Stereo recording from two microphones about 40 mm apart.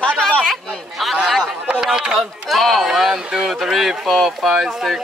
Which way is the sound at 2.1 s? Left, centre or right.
Centre.